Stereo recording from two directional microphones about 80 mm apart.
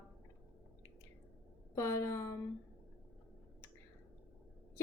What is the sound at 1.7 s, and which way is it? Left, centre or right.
Speech, left.